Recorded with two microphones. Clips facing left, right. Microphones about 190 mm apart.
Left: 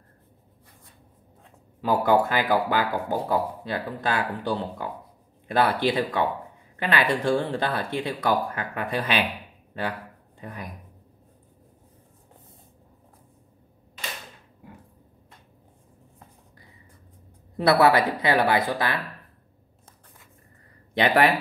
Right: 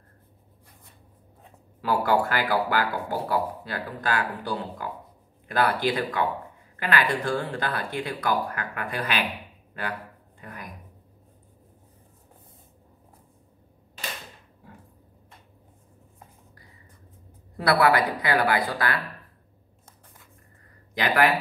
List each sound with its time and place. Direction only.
1.8 s speech: 20° left (ahead or behind)
5.9 s speech: 25° left (ahead or behind)
10.4 s speech: 25° left (ahead or behind)
17.6 s speech: 25° left (ahead or behind)
20.9 s speech: 30° left (ahead or behind)